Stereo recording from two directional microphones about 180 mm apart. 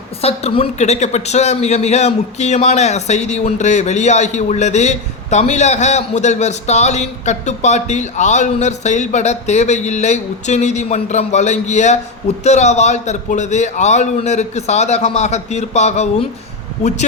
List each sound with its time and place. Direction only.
0.2 s a woman's voice: 35° left (ahead or behind)